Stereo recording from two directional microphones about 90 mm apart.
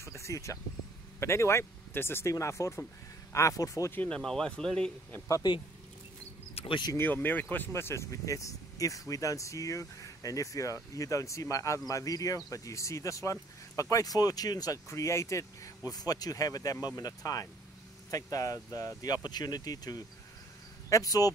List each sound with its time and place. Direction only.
0.1 s speech: 35° left (ahead or behind)
3.9 s speech: 20° left (ahead or behind)
4.2 s speech: 5° left (ahead or behind)
6.5 s a sound: 70° left (ahead or behind)
7.0 s speech: 20° left (ahead or behind); by 14.8 s 45° left (ahead or behind)
14.9 s speech: 30° left (ahead or behind)